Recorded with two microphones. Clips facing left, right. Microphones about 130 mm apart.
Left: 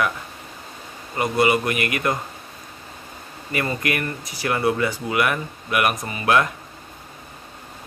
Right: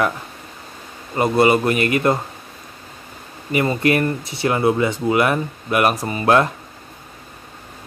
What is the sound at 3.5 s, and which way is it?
Speech, 20° right (ahead or behind).